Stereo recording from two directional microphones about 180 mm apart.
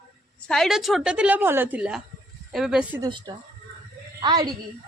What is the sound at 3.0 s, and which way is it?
A woman's voice, 25° right (ahead or behind).